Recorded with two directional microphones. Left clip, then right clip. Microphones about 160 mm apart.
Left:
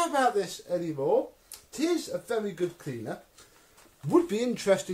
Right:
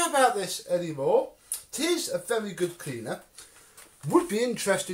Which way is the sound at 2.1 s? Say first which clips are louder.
Right 2 dB; 25° left (ahead or behind).